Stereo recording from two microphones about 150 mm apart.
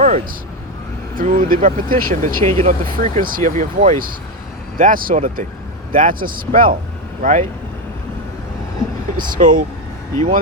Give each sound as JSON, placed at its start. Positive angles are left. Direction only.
{"t": 1.1, "sound": "speech", "side_deg": -65}
{"t": 7.2, "sound": "speech", "side_deg": -55}
{"t": 9.4, "sound": "speech", "side_deg": -60}